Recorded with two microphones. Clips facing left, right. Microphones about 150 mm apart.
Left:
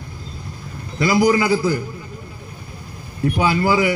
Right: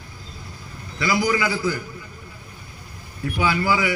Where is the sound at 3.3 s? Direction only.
40° left (ahead or behind).